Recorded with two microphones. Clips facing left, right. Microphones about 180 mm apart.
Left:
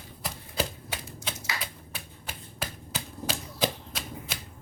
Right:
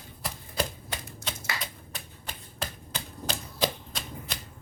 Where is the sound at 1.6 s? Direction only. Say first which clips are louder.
Even; 5° left (ahead or behind).